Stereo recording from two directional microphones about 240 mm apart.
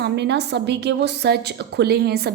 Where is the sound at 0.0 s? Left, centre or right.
Right.